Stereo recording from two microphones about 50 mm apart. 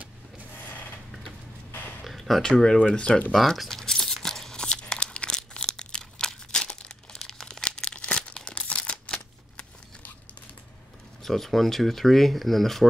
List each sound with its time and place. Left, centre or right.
2.0 s a sound: centre
2.4 s speech: centre
3.3 s crumpling: centre; by 9.1 s left
11.2 s speech: centre